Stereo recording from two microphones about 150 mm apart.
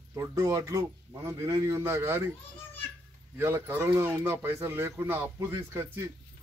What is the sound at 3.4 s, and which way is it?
Speech, 15° right (ahead or behind).